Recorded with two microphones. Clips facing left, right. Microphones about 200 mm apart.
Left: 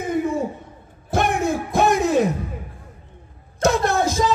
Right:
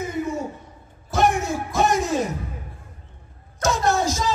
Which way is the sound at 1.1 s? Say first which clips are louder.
Left 1 dB; 55° left (ahead or behind).